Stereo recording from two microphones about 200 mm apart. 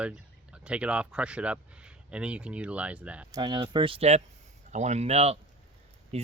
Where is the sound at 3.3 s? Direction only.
20° right (ahead or behind).